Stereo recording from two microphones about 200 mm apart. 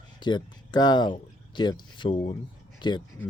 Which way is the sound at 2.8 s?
25° left (ahead or behind).